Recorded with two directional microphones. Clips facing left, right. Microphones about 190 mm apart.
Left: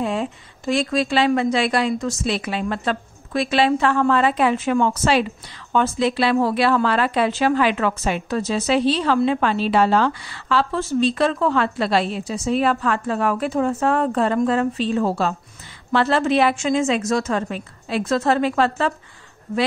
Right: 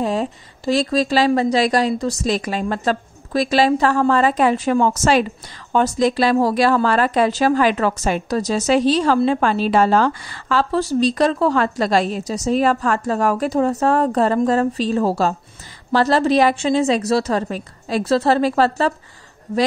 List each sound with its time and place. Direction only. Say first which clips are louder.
0.0 s speech: right 3 dB; 40° right (ahead or behind)